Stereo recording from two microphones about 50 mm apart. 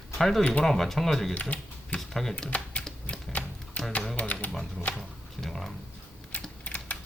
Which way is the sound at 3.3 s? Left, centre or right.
Left.